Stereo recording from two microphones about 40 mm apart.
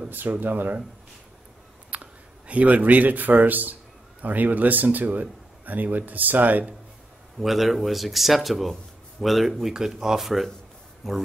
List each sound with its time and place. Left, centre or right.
0.3 s speech: right
1.9 s speech: right
7.3 s speech: centre